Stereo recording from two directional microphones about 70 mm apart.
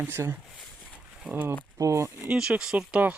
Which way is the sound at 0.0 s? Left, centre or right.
Right.